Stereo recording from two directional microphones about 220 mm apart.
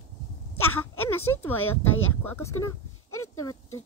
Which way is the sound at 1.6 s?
70° left (ahead or behind).